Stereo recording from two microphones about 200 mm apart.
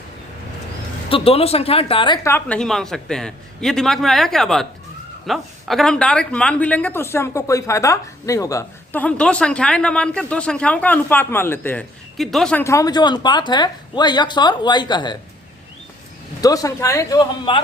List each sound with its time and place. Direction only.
1.1 s speech: 30° left (ahead or behind)
16.4 s speech: 20° left (ahead or behind)